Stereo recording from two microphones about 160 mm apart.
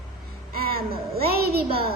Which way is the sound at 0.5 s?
70° right (ahead or behind).